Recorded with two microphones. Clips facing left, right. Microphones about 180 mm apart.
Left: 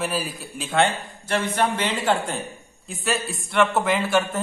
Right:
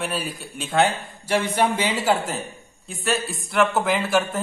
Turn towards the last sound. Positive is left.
turn(degrees=0)  # may be behind; listen again after turning